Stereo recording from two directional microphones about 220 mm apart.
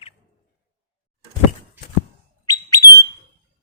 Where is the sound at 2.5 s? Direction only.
15° left (ahead or behind).